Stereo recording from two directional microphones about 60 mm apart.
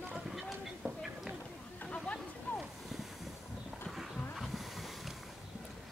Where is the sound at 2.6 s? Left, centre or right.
Centre.